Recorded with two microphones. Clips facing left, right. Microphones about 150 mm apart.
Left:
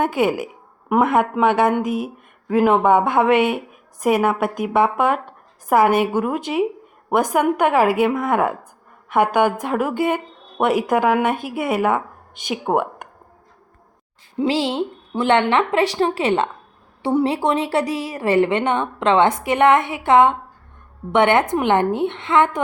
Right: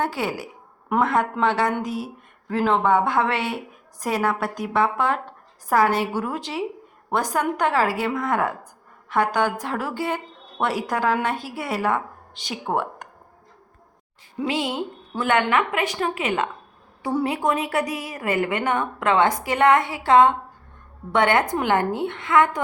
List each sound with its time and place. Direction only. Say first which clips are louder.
0.0 s a woman's voice: left 7 dB; 20° left (ahead or behind)
0.4 s a sound: left 5 dB; 15° left (ahead or behind)
1.4 s a woman's voice: left 5 dB; 20° left (ahead or behind)
14.3 s a woman's voice: left 5 dB; 30° left (ahead or behind)